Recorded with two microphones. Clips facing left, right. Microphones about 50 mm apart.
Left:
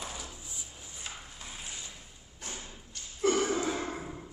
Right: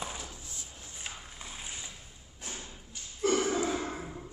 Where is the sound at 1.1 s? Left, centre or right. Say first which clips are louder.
Right 1 dB; centre.